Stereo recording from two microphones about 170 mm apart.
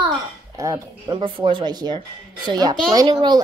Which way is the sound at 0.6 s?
20° right (ahead or behind).